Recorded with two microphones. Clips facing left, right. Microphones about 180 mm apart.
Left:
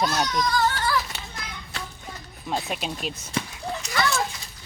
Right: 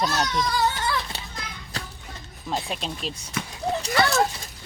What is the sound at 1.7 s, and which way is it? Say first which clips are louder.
Children playing: right 1 dB; 35° right (ahead or behind).